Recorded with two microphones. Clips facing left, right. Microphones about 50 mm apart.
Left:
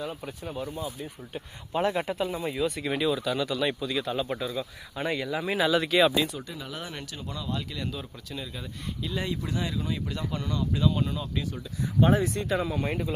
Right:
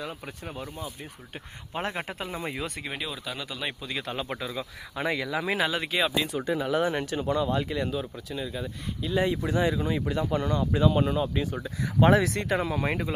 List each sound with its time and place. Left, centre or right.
0.0 s speech: right
0.4 s speech: right
2.8 s speech: centre
4.0 s speech: right
5.6 s speech: right
6.7 s speech: right
7.9 s speech: centre
9.2 s speech: right
11.9 s speech: right